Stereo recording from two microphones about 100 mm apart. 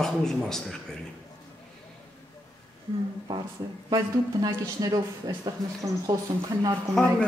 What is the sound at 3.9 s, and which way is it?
Speech, 40° right (ahead or behind).